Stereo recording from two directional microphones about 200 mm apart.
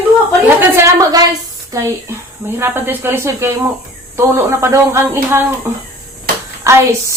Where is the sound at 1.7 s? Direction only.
15° right (ahead or behind).